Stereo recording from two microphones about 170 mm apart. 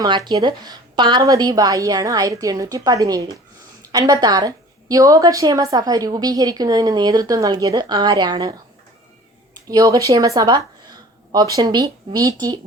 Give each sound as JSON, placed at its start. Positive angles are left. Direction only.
{"t": 0.3, "sound": "a woman's voice", "side_deg": -25}
{"t": 9.6, "sound": "a woman's voice", "side_deg": -20}